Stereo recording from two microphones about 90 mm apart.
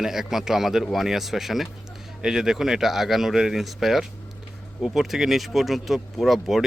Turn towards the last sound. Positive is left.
turn(degrees=0)  # may be behind; listen again after turning